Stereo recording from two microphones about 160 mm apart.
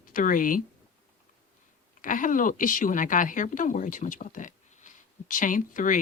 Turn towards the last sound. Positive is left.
turn(degrees=55)  # may be behind; listen again after turning